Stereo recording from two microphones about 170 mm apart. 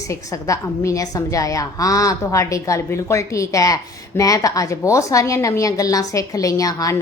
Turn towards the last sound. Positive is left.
turn(degrees=20)  # may be behind; listen again after turning